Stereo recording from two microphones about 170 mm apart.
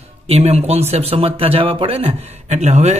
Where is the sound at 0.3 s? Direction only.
40° right (ahead or behind).